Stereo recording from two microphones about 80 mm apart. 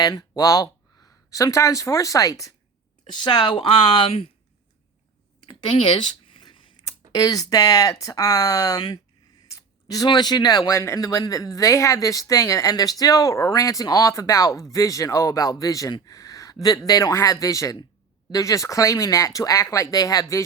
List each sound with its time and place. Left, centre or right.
0.0 s speech: left
3.1 s speech: left
5.5 s a sound: left
7.1 s speech: left
9.8 s speech: left
10.8 s speech: left